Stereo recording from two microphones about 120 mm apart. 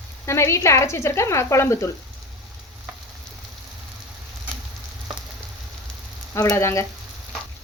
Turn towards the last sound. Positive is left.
turn(degrees=25)  # may be behind; listen again after turning